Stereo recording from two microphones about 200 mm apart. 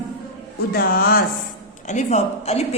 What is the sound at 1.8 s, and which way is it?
Speech, 35° left (ahead or behind).